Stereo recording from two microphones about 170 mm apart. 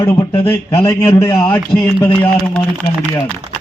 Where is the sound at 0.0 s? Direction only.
15° left (ahead or behind).